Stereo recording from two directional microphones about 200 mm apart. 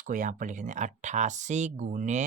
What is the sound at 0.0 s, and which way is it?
Speech, 40° right (ahead or behind).